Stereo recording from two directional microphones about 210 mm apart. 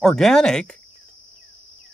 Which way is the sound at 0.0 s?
5° left (ahead or behind).